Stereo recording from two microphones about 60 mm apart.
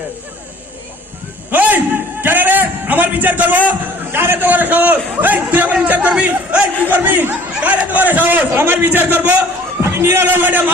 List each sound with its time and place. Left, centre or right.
1.5 s a sound: right
3.7 s a man's voice: right; by 6.7 s centre
6.8 s speech: right
9.8 s speech: right